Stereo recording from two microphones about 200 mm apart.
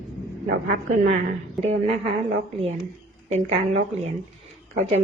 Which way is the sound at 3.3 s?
35° right (ahead or behind).